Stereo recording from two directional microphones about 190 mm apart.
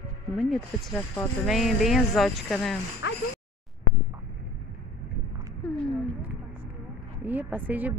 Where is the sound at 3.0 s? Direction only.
65° left (ahead or behind).